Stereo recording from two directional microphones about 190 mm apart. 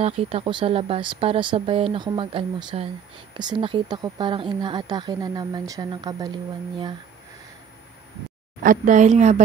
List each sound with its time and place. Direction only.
0.0 s speech: 30° right (ahead or behind)
8.6 s speech: 40° right (ahead or behind)